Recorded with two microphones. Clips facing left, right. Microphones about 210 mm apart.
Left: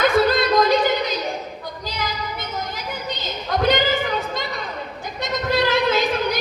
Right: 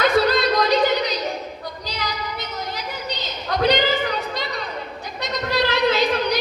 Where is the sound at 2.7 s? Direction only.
50° left (ahead or behind).